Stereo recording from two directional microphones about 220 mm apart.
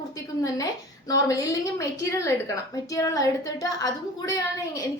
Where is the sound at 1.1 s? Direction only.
15° left (ahead or behind).